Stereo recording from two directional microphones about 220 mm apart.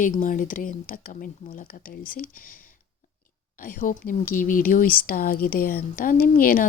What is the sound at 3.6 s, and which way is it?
Speech, 40° left (ahead or behind).